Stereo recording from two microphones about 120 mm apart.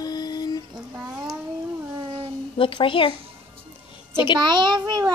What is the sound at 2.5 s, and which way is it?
A woman's voice, 45° left (ahead or behind).